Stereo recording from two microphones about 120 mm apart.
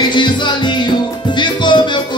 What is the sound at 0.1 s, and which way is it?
Music, 40° left (ahead or behind).